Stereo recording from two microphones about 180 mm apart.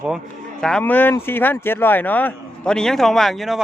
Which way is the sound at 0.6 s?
5° left (ahead or behind).